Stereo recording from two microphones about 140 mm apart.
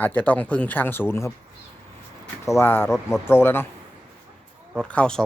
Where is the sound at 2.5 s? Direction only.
20° left (ahead or behind).